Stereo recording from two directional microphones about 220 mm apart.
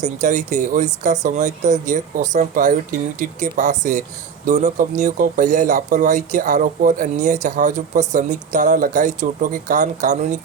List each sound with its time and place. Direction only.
0.0 s speech: 35° right (ahead or behind)